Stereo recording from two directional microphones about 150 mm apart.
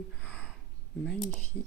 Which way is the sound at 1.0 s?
5° left (ahead or behind).